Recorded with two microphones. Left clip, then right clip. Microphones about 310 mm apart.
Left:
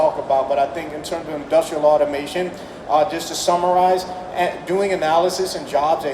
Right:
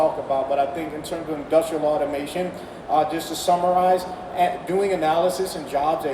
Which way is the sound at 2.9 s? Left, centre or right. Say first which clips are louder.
Left 3 dB; centre.